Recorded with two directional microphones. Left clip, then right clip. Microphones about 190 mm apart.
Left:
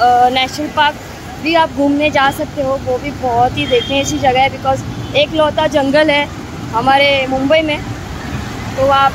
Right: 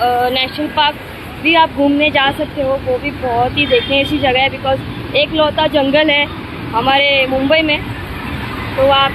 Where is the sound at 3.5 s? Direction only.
5° left (ahead or behind).